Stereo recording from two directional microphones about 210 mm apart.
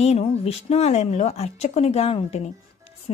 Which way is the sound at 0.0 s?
30° left (ahead or behind).